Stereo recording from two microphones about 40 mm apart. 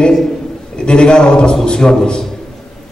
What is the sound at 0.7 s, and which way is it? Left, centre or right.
A man's voice, left.